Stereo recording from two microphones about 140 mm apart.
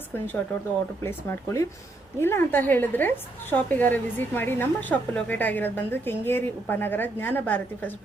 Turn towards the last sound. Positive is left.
turn(degrees=15)  # may be behind; listen again after turning